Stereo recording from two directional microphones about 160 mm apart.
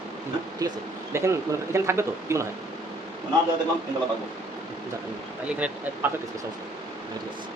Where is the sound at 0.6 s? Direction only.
20° right (ahead or behind).